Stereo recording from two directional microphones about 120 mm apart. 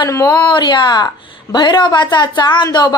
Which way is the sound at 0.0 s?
25° left (ahead or behind).